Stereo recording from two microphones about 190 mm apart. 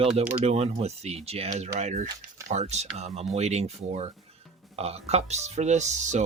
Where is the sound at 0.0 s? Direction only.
35° right (ahead or behind).